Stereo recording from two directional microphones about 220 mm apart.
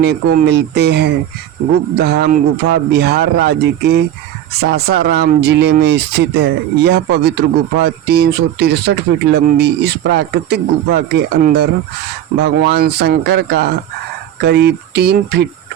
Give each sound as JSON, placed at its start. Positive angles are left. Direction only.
{"t": 0.0, "sound": "speech", "side_deg": -45}